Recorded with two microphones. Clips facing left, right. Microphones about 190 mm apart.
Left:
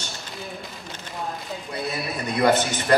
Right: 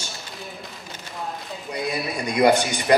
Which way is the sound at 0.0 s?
5° right (ahead or behind).